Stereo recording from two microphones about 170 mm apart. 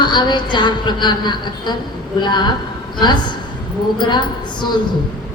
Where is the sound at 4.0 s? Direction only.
25° left (ahead or behind).